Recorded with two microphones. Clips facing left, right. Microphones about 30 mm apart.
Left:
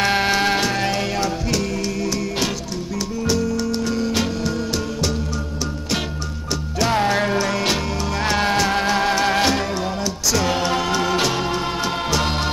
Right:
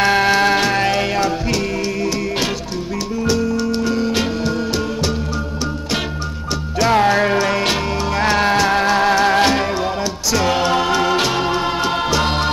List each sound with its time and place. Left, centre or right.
0.0 s music: centre
6.9 s music: centre